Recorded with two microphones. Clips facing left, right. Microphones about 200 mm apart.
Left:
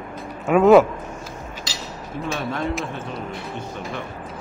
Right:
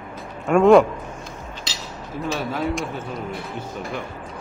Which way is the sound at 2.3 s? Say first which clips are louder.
Right 1 dB; 5° right (ahead or behind).